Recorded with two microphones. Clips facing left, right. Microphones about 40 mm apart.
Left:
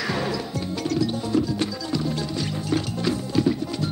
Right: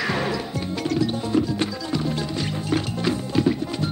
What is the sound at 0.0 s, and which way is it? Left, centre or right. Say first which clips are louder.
Music: right 2 dB; right.